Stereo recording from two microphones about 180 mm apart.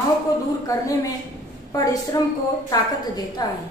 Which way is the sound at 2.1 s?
20° left (ahead or behind).